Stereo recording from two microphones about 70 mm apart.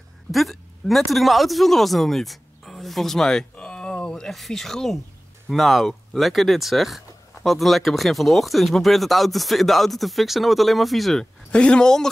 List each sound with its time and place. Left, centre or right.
0.3 s a man's voice: centre
11.5 s a woman's voice: centre